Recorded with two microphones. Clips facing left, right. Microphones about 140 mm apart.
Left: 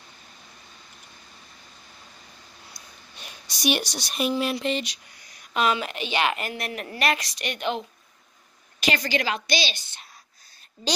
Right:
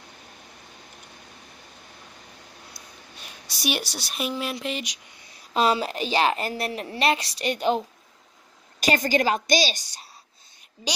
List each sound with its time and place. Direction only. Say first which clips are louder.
2.7 s speech: right 2 dB; 5° right (ahead or behind)
5.2 s a woman's voice: right 2 dB; 30° right (ahead or behind)